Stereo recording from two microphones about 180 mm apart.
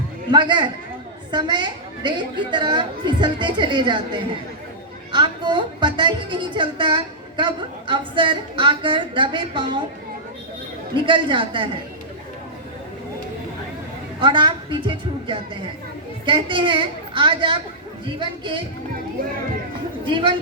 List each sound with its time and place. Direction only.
0.3 s speech: 25° right (ahead or behind)
11.0 s speech: 25° right (ahead or behind)
14.2 s speech: 25° right (ahead or behind)
20.1 s speech: 25° right (ahead or behind)